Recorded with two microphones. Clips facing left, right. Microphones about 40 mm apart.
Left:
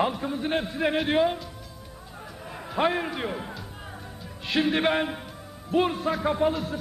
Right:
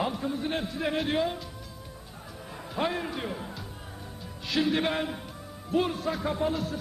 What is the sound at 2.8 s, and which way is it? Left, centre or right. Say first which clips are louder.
A man's voice: left 5 dB; left.